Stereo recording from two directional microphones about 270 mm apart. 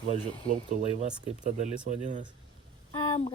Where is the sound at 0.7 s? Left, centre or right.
Right.